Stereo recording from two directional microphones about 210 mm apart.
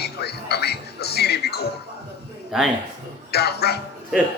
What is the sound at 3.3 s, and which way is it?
Speech, 50° left (ahead or behind).